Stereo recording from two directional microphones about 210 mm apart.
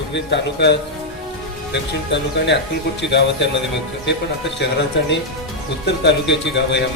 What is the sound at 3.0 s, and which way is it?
Speech, 55° left (ahead or behind).